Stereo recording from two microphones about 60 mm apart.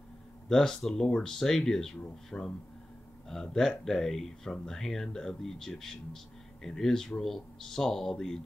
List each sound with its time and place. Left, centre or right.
0.5 s speech: centre
2.3 s speech: centre
3.3 s speech: centre